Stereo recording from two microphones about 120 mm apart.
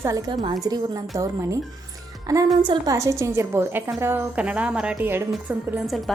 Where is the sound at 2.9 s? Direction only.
25° right (ahead or behind).